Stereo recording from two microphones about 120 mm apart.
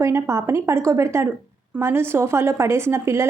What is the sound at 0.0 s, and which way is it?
A woman's voice, 25° right (ahead or behind).